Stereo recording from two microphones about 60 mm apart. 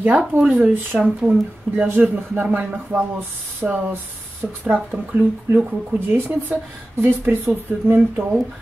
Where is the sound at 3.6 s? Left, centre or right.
Centre.